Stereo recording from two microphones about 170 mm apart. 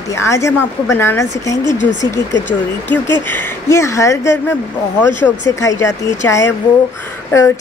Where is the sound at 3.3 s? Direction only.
15° left (ahead or behind).